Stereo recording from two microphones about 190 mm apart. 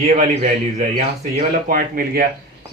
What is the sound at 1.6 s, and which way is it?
Speech, 50° right (ahead or behind).